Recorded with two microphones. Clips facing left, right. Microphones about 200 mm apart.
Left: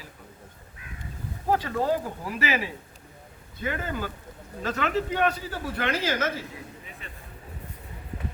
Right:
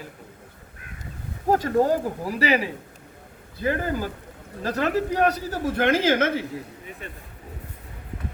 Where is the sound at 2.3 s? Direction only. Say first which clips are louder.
Right 5 dB; 35° right (ahead or behind); by 6.4 s 55° right (ahead or behind).